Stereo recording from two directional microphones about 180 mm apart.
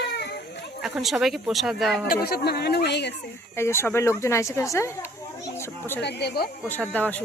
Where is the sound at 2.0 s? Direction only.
55° left (ahead or behind).